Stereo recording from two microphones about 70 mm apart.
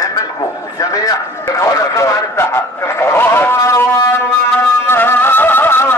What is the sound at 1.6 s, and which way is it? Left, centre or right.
A man's voice, left.